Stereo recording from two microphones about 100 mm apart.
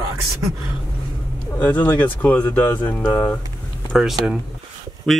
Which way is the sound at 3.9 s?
5° right (ahead or behind).